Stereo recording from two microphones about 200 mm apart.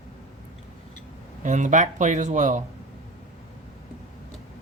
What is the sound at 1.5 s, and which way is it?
Speech, 40° right (ahead or behind).